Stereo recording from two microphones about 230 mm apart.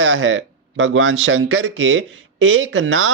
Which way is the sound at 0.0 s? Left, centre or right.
Right.